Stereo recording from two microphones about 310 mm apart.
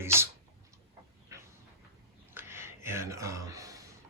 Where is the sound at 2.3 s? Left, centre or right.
Centre.